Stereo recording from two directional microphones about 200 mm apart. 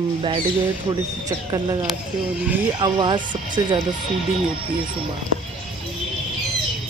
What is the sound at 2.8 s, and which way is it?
Speech, 25° right (ahead or behind).